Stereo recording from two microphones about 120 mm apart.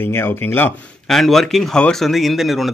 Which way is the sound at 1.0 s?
Centre (ahead or behind).